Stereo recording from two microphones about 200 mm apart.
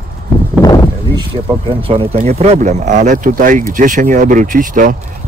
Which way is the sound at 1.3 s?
25° right (ahead or behind).